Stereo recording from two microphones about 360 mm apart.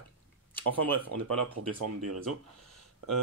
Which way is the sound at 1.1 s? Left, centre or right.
Right.